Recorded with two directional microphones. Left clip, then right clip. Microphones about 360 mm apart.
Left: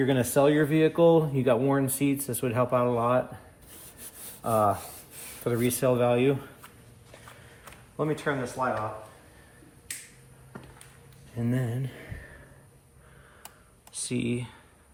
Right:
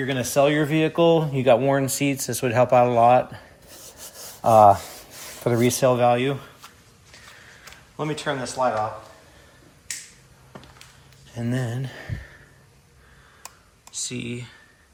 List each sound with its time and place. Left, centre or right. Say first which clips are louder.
0.0 s speech: right 3 dB; centre
4.4 s speech: right 11 dB; centre
7.6 s a sound: right 1 dB; centre
10.5 s a sound: right 3 dB; centre
11.3 s speech: right 3 dB; centre
13.9 s speech: even; centre